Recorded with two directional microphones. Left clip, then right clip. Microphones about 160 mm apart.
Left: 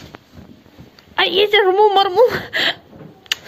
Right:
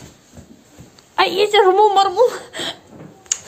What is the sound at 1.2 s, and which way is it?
A woman's voice, centre (ahead or behind).